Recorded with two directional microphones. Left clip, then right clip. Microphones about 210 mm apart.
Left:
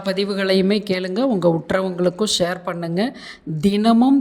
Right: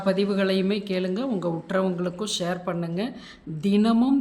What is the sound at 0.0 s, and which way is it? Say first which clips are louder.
A woman's voice: left 2 dB; 30° left (ahead or behind).